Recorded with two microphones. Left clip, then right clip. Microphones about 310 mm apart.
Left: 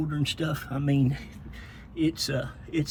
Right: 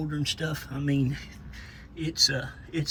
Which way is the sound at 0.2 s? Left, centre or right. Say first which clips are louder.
Left 1 dB; centre.